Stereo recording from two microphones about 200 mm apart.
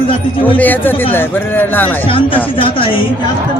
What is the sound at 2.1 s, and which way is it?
Speech, 25° left (ahead or behind).